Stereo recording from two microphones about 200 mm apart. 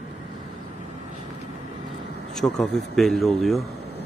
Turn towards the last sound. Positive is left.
turn(degrees=0)  # may be behind; listen again after turning